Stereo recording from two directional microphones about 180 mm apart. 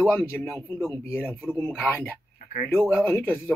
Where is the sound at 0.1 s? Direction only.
10° left (ahead or behind).